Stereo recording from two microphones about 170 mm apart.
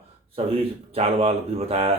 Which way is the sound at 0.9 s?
35° right (ahead or behind).